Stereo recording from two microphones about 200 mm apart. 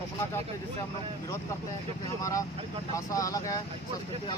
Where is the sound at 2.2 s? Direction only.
15° left (ahead or behind).